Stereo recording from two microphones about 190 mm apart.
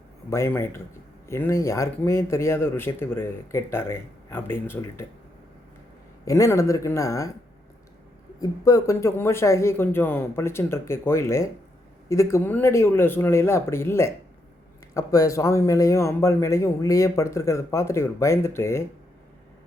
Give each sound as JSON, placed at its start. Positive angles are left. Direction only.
{"t": 0.3, "sound": "a man's voice", "side_deg": 15}
{"t": 6.2, "sound": "a man's voice", "side_deg": 15}
{"t": 8.4, "sound": "a man's voice", "side_deg": 20}